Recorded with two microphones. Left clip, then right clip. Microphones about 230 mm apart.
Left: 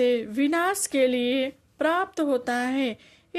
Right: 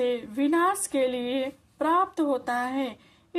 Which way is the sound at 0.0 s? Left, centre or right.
Left.